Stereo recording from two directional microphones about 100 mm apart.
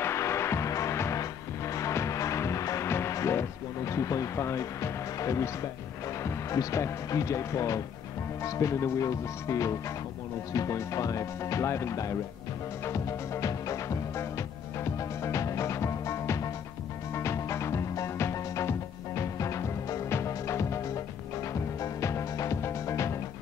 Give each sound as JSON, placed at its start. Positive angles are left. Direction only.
{"t": 0.0, "sound": "music", "side_deg": 30}
{"t": 6.2, "sound": "speech", "side_deg": 35}
{"t": 12.8, "sound": "music", "side_deg": 30}